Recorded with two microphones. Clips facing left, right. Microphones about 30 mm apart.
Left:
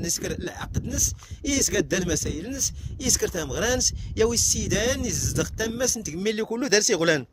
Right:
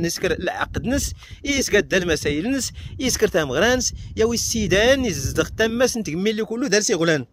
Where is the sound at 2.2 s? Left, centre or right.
Right.